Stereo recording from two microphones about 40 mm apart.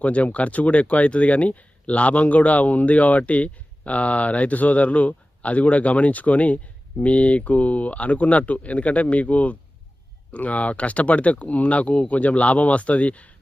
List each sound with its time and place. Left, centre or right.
0.0 s speech: left